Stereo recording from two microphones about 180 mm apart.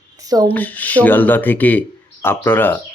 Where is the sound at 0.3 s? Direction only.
20° right (ahead or behind).